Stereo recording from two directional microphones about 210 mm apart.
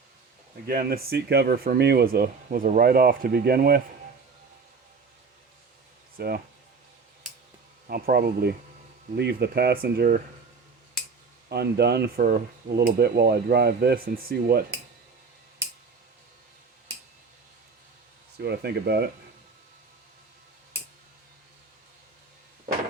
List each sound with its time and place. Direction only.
0.7 s speech: 45° right (ahead or behind)
6.1 s speech: 45° right (ahead or behind)
7.9 s speech: 45° right (ahead or behind)
11.4 s speech: 50° right (ahead or behind)
18.3 s speech: 50° right (ahead or behind)